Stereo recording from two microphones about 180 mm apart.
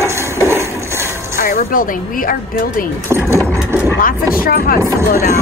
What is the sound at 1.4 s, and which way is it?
Music, 50° left (ahead or behind).